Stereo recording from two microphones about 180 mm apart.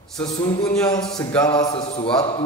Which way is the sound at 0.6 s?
5° left (ahead or behind).